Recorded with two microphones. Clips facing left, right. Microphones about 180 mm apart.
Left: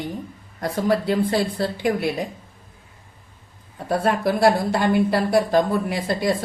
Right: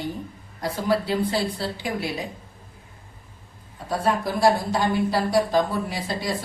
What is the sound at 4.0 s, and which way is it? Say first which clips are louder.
Speech: left 2 dB; 60° left (ahead or behind).